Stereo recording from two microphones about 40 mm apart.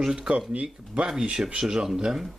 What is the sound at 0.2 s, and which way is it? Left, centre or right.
A man's voice, right.